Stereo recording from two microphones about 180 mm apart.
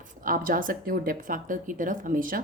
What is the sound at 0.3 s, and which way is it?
A woman's voice, 50° right (ahead or behind).